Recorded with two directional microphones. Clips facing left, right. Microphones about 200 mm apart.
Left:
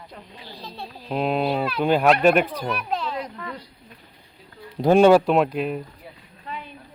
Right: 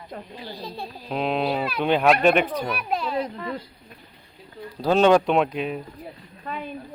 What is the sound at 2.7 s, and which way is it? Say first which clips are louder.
Speech: even; 10° right (ahead or behind).